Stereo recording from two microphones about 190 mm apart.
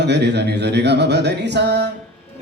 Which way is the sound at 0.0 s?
65° right (ahead or behind).